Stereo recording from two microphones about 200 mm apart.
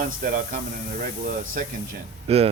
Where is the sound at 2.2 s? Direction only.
30° right (ahead or behind).